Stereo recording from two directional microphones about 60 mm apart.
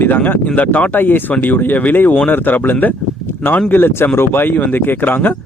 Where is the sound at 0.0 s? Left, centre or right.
Left.